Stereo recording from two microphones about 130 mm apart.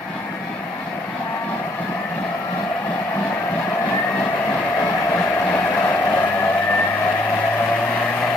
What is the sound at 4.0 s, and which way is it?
Vehicle, 10° left (ahead or behind).